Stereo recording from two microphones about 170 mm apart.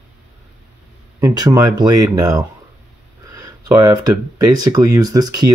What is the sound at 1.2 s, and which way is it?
Speech, 20° right (ahead or behind).